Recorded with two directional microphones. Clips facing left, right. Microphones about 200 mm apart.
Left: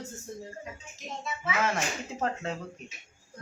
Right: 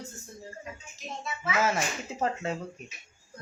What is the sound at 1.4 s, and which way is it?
Speech, 5° right (ahead or behind).